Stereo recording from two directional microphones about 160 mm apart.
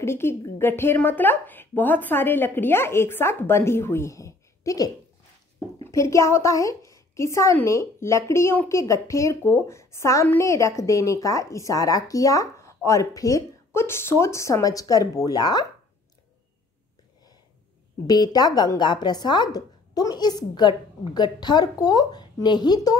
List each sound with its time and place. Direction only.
0.0 s a woman's voice: 15° left (ahead or behind)
18.0 s a woman's voice: 25° left (ahead or behind)